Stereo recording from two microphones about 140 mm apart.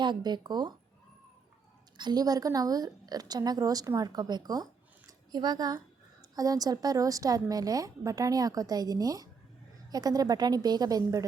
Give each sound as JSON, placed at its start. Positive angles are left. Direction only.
{"t": 0.0, "sound": "speech", "side_deg": -30}
{"t": 2.0, "sound": "a woman's voice", "side_deg": -30}